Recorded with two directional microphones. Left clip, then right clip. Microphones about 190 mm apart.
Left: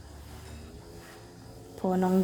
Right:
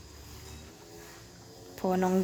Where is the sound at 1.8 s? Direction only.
Centre (ahead or behind).